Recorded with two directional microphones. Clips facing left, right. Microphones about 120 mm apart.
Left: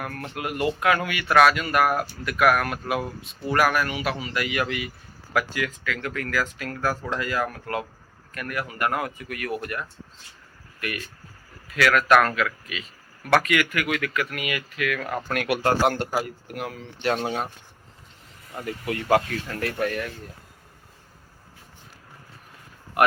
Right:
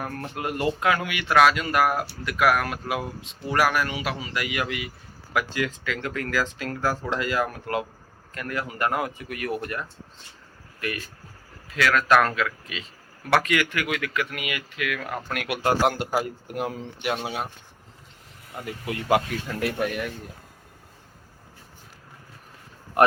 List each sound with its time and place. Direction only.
0.0 s speech: 30° right (ahead or behind)
15.8 s a man's voice: centre (ahead or behind)
16.2 s speech: 20° right (ahead or behind)
17.0 s speech: 10° right (ahead or behind)
18.6 s speech: 20° right (ahead or behind)
23.0 s speech: 30° right (ahead or behind)